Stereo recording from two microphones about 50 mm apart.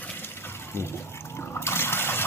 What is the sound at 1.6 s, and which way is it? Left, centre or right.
Water, left.